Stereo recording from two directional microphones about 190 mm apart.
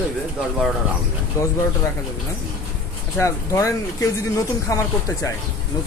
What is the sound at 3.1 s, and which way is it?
Speech, 15° left (ahead or behind).